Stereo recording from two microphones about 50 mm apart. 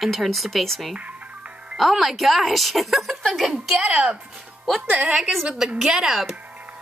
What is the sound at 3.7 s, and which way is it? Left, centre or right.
Speech, right.